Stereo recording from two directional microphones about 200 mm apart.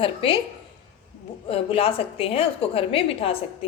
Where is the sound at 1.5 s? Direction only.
30° left (ahead or behind).